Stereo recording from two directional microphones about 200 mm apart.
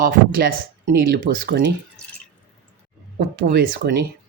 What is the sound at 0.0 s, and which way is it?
Speech, 40° right (ahead or behind).